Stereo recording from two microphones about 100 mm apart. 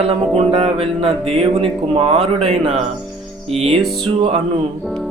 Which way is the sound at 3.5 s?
90° right.